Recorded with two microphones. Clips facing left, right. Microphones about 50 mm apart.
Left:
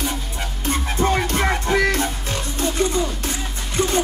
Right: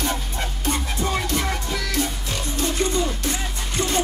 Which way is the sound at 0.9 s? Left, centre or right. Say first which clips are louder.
Left 8 dB; left.